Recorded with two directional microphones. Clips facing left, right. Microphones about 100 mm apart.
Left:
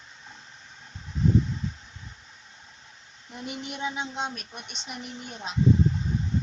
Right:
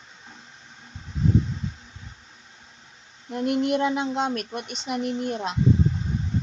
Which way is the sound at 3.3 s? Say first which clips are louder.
Right 14 dB; 65° right (ahead or behind).